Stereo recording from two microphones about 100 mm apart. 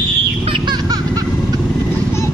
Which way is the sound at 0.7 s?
45° right (ahead or behind).